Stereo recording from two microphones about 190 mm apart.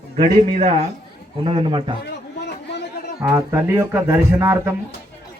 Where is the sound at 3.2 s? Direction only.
15° right (ahead or behind).